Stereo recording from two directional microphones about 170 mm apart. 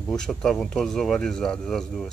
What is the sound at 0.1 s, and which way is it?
Speech, 5° left (ahead or behind).